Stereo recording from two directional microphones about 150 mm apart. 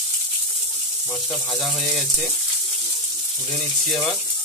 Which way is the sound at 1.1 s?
Centre (ahead or behind).